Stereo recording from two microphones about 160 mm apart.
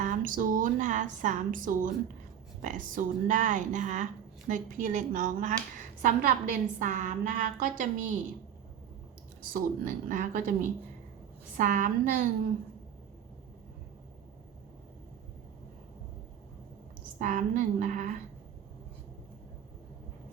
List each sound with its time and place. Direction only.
0.0 s a woman's voice: 55° right (ahead or behind)
9.4 s a woman's voice: 60° right (ahead or behind)
17.2 s a woman's voice: 50° right (ahead or behind)